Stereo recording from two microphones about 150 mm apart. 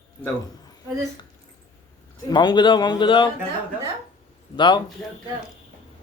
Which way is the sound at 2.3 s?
30° left (ahead or behind).